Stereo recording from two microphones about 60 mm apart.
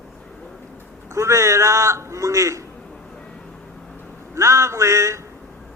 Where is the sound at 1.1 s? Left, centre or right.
Right.